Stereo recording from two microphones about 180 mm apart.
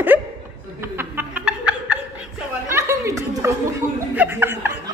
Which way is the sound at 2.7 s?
15° right (ahead or behind).